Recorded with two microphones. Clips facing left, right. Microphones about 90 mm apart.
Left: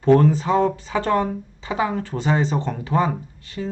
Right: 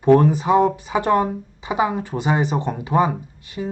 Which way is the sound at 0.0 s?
15° right (ahead or behind).